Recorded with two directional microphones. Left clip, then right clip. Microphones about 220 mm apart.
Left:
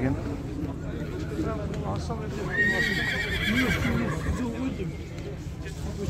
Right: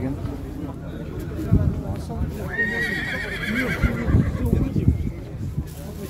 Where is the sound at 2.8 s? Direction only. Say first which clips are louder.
Right 1 dB; 45° left (ahead or behind).